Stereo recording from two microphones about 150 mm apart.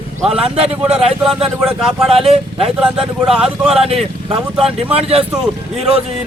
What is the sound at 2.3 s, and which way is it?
Speech, 40° right (ahead or behind).